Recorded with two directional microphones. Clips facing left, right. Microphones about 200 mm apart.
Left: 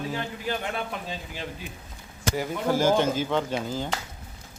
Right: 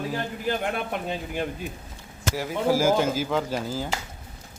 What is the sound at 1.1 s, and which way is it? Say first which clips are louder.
Speech: right 6 dB; 55° right (ahead or behind).